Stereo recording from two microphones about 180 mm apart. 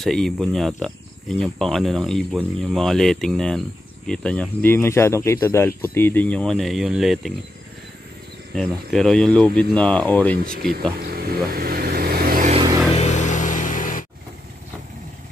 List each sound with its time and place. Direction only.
0.0 s speech: 5° left (ahead or behind)
8.5 s speech: centre (ahead or behind)
11.1 s vehicle: 55° right (ahead or behind)
12.9 s music: 40° left (ahead or behind)